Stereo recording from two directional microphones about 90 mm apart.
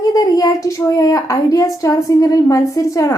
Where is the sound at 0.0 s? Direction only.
40° left (ahead or behind).